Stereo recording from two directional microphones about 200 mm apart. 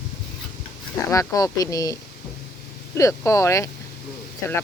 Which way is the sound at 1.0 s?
15° left (ahead or behind).